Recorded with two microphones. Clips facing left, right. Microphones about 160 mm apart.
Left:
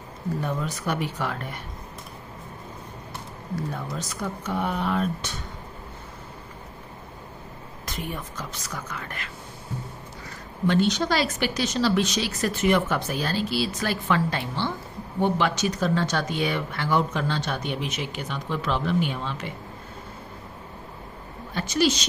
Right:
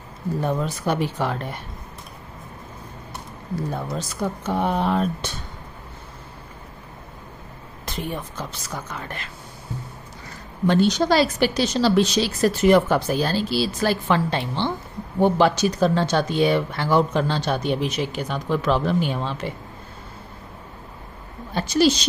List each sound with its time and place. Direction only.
0.4 s speech: 30° right (ahead or behind)
3.7 s speech: 30° right (ahead or behind)
7.8 s speech: 30° right (ahead or behind)
10.7 s speech: 35° right (ahead or behind)
21.5 s speech: 30° right (ahead or behind)